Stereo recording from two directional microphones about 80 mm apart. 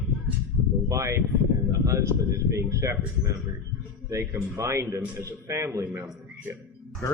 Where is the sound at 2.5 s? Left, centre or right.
Right.